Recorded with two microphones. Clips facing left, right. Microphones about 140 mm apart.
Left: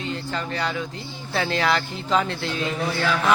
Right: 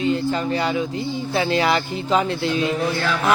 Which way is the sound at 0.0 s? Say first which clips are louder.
Right 8 dB; 10° right (ahead or behind).